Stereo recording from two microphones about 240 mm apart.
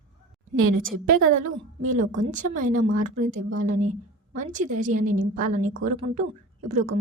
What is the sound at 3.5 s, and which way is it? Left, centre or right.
A woman's voice, right.